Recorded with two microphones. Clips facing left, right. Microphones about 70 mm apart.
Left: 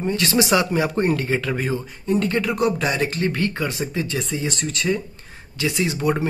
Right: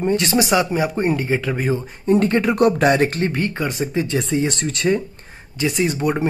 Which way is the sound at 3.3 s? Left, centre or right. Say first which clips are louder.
Right 1 dB; right.